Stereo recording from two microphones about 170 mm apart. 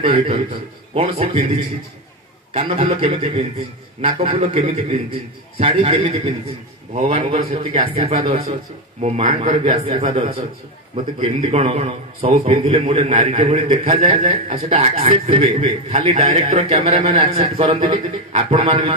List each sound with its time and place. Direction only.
0.0 s a man's voice: 30° right (ahead or behind)
13.0 s a man's voice: 45° right (ahead or behind)